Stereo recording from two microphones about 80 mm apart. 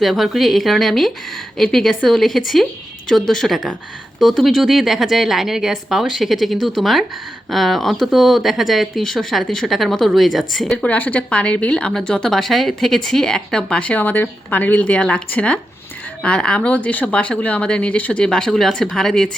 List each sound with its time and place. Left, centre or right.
0.0 s a woman's voice: centre
10.8 s speech: centre